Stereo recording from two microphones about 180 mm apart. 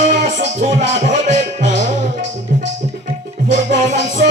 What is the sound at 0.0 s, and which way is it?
Music, 40° right (ahead or behind).